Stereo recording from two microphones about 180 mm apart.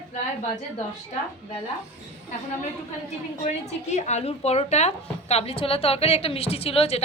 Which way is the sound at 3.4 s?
40° left (ahead or behind).